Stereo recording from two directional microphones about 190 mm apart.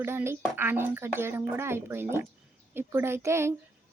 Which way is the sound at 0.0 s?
10° right (ahead or behind).